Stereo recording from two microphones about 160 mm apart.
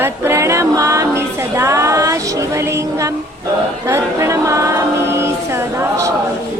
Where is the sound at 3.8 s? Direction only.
15° right (ahead or behind).